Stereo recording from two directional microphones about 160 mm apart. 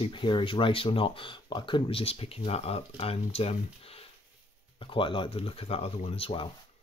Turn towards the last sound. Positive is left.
turn(degrees=35)  # may be behind; listen again after turning